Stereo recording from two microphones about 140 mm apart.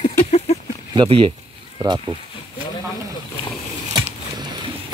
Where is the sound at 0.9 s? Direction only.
40° right (ahead or behind).